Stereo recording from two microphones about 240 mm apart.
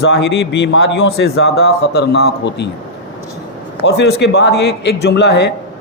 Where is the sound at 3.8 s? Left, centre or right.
Left.